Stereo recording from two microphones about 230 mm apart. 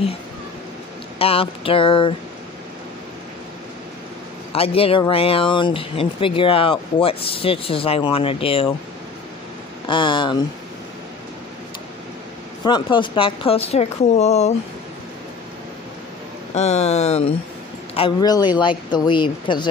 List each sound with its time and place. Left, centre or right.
1.2 s speech: left
4.5 s speech: left
9.8 s speech: left
12.6 s speech: centre
16.5 s speech: left